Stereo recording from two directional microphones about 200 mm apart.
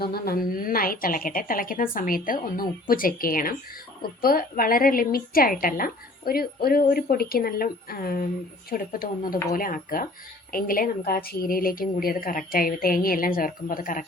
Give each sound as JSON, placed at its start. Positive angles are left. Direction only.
{"t": 0.0, "sound": "a woman's voice", "side_deg": 50}